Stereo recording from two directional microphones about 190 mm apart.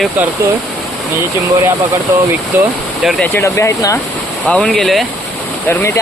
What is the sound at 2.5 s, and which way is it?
Speech, 10° right (ahead or behind).